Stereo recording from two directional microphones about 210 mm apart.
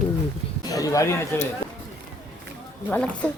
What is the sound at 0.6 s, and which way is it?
Speech, 15° left (ahead or behind).